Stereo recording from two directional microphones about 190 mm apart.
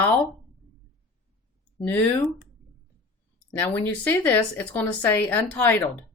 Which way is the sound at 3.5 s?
10° left (ahead or behind).